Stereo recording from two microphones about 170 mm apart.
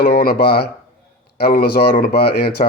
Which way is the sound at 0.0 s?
65° left (ahead or behind).